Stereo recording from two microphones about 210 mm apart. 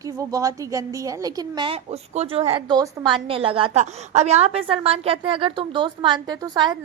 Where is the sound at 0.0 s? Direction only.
15° right (ahead or behind).